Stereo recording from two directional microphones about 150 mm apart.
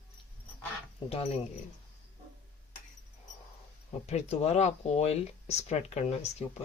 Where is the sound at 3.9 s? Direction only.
45° left (ahead or behind).